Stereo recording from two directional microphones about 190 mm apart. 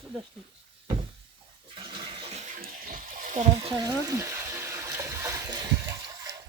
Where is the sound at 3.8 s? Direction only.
15° right (ahead or behind).